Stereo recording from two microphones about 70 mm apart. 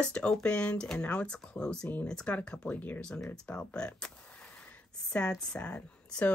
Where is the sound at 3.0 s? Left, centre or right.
Centre.